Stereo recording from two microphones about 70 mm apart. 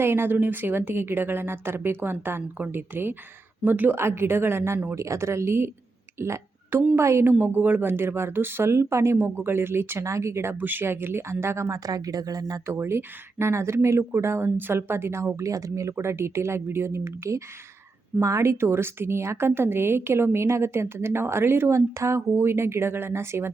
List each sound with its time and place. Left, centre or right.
0.0 s a woman's voice: right
6.1 s music: right
6.9 s a woman's voice: right
7.3 s a woman's voice: right
10.6 s a woman's voice: right
11.9 s speech: right
12.6 s a woman's voice: right
18.5 s a woman's voice: right